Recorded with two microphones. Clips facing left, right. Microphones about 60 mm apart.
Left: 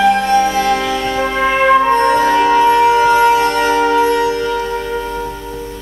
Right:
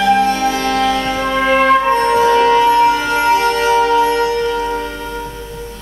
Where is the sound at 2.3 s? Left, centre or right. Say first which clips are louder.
Left 1 dB; centre.